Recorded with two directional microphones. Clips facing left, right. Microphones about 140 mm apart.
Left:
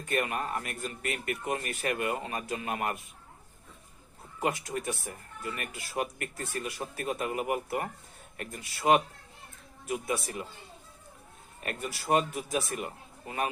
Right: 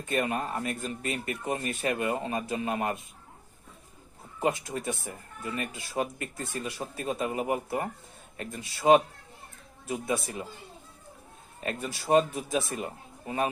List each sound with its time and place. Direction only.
0.1 s speech: 25° right (ahead or behind)
4.4 s speech: 25° right (ahead or behind)
11.6 s speech: 30° right (ahead or behind)